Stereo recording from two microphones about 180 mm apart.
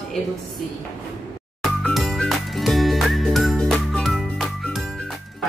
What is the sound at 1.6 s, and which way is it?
Music, centre (ahead or behind).